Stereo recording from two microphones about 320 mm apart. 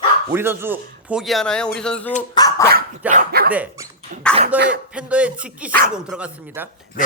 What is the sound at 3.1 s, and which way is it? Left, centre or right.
Speech, right.